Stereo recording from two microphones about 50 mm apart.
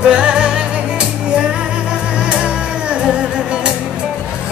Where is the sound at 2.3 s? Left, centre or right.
Right.